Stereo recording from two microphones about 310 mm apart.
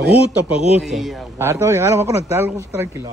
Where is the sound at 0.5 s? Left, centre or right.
Centre.